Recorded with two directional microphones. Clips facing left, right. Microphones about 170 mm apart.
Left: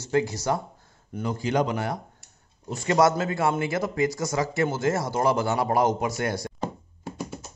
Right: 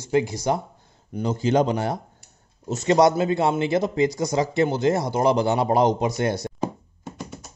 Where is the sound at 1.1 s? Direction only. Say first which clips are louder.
Right 4 dB; 25° right (ahead or behind).